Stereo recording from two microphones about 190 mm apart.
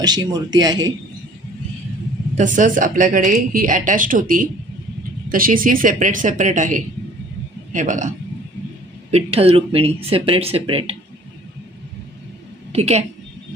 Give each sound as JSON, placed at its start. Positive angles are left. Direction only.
{"t": 0.0, "sound": "speech", "side_deg": -20}
{"t": 2.3, "sound": "speech", "side_deg": -40}
{"t": 9.1, "sound": "speech", "side_deg": -30}
{"t": 12.7, "sound": "speech", "side_deg": -35}